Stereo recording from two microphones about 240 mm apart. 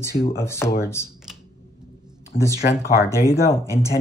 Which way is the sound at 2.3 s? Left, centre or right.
Left.